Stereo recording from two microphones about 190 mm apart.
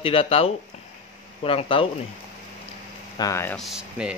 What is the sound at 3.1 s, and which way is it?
Speech, 15° left (ahead or behind).